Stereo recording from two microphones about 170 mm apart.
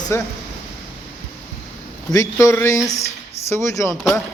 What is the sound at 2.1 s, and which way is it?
Speech, 20° left (ahead or behind).